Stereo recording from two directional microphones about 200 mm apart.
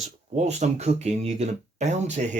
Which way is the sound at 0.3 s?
35° right (ahead or behind).